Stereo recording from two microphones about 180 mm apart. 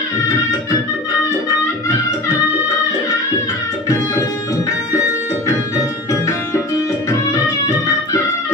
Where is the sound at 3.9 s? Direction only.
20° left (ahead or behind).